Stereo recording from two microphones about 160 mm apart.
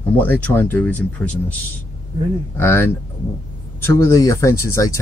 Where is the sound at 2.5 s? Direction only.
15° left (ahead or behind).